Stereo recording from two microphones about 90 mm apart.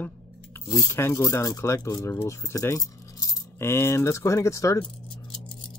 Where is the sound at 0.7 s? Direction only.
30° left (ahead or behind).